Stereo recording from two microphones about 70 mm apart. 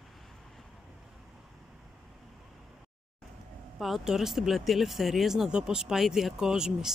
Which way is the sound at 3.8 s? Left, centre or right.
Centre.